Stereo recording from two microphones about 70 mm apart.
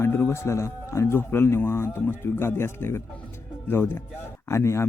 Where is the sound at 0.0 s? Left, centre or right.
Left.